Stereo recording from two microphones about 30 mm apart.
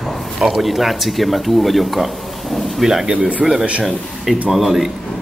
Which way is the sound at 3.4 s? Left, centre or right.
Right.